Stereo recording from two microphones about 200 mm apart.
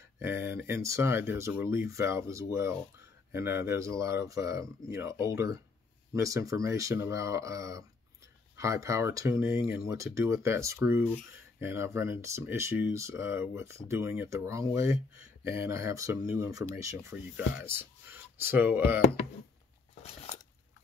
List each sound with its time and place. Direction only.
0.2 s speech: 10° right (ahead or behind)